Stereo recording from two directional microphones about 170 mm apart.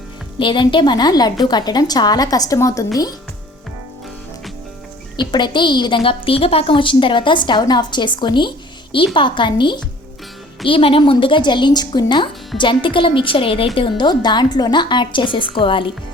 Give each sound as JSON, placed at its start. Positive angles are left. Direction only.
{"t": 0.3, "sound": "a woman's voice", "side_deg": 30}
{"t": 5.1, "sound": "a woman's voice", "side_deg": 25}